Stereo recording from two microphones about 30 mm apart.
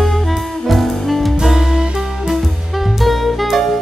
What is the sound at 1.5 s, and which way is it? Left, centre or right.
Music, centre.